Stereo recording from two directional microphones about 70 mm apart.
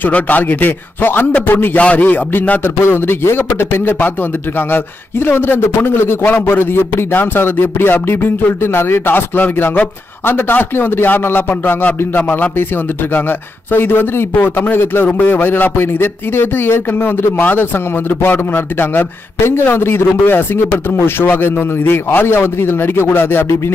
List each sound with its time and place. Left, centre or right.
0.0 s a man's voice: left
13.7 s a man's voice: left